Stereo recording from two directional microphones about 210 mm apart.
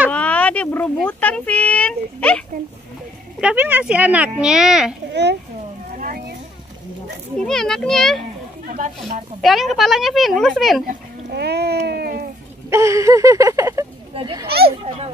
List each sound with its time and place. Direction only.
0.1 s a sound: 5° left (ahead or behind)
3.3 s speech: 5° right (ahead or behind)
5.1 s a child's voice: 55° right (ahead or behind)
5.9 s a sound: 45° right (ahead or behind)
7.3 s speech: centre (ahead or behind)
8.6 s speech: 35° right (ahead or behind)
9.4 s speech: centre (ahead or behind)
10.9 s speech: 50° right (ahead or behind)
12.6 s a sound: 15° right (ahead or behind)
14.1 s a child's voice: 25° right (ahead or behind)